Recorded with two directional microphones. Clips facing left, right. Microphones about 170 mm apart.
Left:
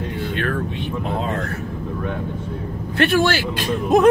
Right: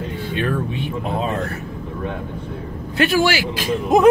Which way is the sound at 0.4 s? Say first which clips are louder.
Right 4 dB; 15° right (ahead or behind).